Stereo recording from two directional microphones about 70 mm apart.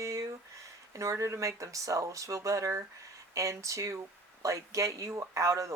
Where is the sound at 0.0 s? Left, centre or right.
Right.